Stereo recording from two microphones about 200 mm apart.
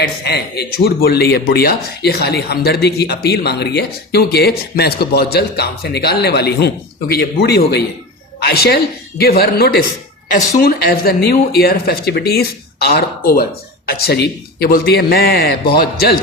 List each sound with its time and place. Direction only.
0.3 s speech: 55° left (ahead or behind)